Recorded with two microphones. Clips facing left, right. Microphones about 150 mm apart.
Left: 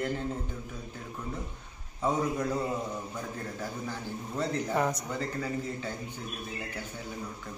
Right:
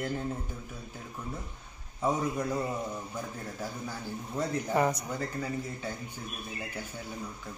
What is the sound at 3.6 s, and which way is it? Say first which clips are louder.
A man's voice: even; 10° right (ahead or behind).